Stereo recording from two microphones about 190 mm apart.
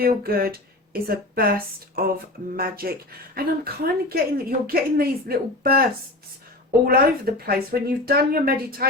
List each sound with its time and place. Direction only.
0.0 s speech: 50° right (ahead or behind)